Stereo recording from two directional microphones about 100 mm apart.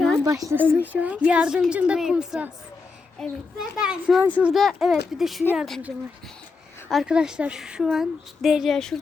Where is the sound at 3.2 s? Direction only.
5° left (ahead or behind).